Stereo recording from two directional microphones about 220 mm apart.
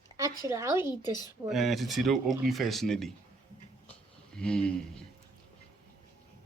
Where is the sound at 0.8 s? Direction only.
20° left (ahead or behind).